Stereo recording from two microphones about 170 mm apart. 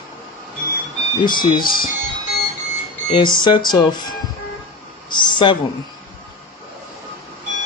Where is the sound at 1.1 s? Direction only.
25° left (ahead or behind).